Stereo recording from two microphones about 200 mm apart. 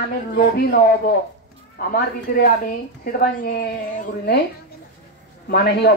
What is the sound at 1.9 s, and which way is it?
Speech, 45° left (ahead or behind).